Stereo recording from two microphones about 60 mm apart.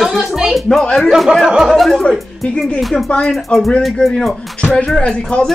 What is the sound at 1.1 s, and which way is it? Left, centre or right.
Music, centre.